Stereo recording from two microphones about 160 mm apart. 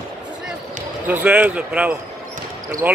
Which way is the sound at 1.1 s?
10° right (ahead or behind).